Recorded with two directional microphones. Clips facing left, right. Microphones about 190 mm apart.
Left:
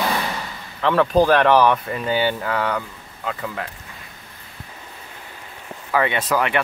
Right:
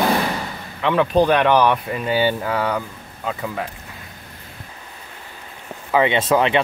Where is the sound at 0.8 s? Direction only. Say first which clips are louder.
Even; centre (ahead or behind).